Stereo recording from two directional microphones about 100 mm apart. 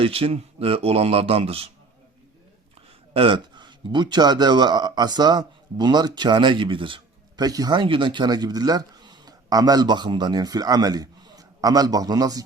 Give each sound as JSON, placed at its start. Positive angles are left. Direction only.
{"t": 0.0, "sound": "a man's voice", "side_deg": -75}
{"t": 3.1, "sound": "a man's voice", "side_deg": -65}
{"t": 7.3, "sound": "speech", "side_deg": -40}